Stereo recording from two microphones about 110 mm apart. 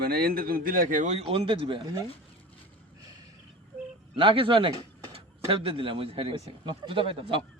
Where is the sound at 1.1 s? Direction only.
70° right (ahead or behind); by 1.8 s 55° right (ahead or behind).